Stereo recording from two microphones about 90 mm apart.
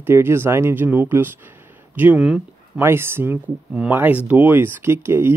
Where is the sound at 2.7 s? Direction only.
25° right (ahead or behind).